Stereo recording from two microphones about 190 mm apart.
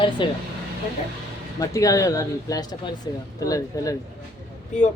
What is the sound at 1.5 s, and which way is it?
Speech, 20° left (ahead or behind).